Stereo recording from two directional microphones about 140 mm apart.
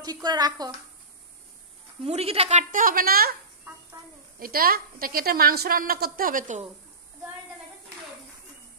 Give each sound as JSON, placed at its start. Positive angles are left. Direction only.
{"t": 0.0, "sound": "a woman's voice", "side_deg": -30}
{"t": 2.0, "sound": "a woman's voice", "side_deg": -45}
{"t": 2.7, "sound": "a woman's voice", "side_deg": -85}
{"t": 4.4, "sound": "a woman's voice", "side_deg": -90}